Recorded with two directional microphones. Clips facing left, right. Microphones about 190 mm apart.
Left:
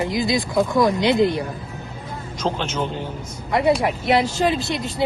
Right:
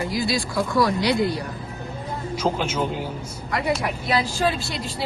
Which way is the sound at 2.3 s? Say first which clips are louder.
Even; 10° right (ahead or behind).